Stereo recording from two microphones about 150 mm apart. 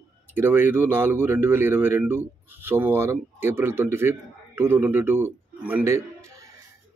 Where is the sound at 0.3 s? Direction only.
15° right (ahead or behind).